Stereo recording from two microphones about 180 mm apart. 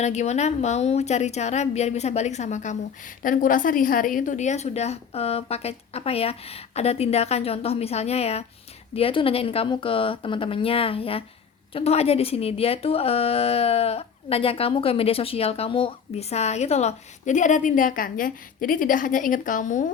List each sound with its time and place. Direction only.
0.0 s a woman's voice: 40° left (ahead or behind)